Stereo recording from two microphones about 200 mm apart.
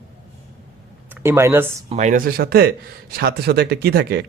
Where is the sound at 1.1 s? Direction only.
10° right (ahead or behind).